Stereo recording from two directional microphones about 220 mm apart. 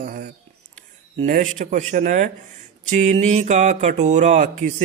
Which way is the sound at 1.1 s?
35° right (ahead or behind).